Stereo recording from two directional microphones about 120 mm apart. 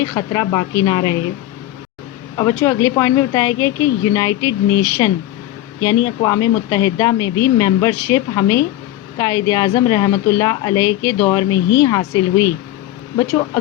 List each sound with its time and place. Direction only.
0.0 s speech: 30° left (ahead or behind)
2.3 s speech: 30° left (ahead or behind)